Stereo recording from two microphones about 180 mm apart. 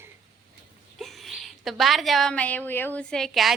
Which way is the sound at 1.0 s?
Centre (ahead or behind).